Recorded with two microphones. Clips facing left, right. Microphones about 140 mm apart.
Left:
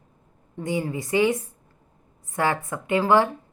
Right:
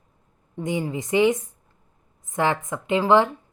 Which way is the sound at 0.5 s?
20° right (ahead or behind).